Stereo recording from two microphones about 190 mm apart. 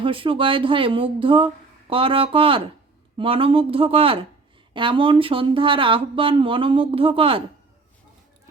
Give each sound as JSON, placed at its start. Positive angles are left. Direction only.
{"t": 0.0, "sound": "speech", "side_deg": -25}